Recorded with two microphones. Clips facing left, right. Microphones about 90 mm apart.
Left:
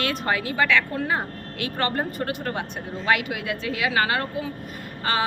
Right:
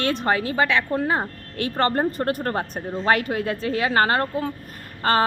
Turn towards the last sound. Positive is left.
turn(degrees=-45)  # may be behind; listen again after turning